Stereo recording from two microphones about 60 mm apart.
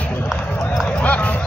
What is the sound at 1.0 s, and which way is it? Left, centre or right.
Clip-clop, left.